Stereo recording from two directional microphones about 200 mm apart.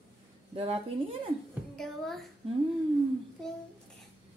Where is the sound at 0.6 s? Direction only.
30° right (ahead or behind).